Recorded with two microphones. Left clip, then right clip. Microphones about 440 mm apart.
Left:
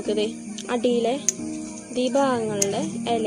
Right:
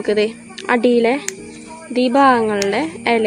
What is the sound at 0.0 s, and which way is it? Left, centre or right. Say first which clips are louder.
Speech: right 8 dB; right.